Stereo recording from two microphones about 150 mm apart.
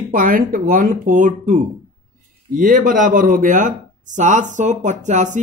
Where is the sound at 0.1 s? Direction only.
70° right (ahead or behind).